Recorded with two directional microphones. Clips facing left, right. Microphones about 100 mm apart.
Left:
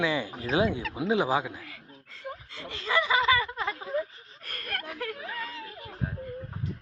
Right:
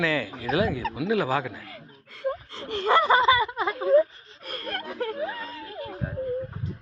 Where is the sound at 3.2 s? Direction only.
20° right (ahead or behind).